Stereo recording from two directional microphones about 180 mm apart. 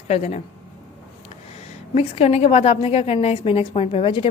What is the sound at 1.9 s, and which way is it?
A woman's voice, 35° left (ahead or behind).